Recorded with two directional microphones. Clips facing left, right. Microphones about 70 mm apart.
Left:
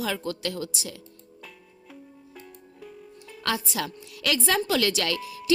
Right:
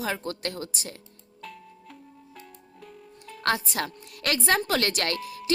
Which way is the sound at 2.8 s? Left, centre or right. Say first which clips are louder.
Left 2 dB; centre.